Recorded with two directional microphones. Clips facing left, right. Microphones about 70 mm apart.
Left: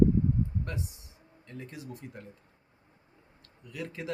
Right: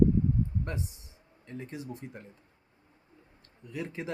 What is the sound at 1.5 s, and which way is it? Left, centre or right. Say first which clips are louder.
Speech: right 3 dB; right.